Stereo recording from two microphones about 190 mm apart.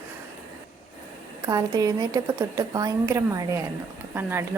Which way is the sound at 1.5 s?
20° right (ahead or behind).